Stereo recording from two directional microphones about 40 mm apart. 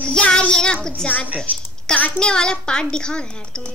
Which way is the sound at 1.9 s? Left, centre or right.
Centre.